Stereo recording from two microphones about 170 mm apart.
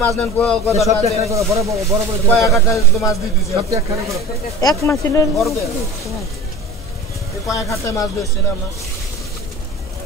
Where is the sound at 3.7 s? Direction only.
20° right (ahead or behind).